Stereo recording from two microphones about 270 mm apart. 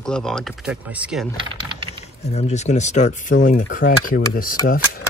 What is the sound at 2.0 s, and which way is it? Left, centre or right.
Speech, left.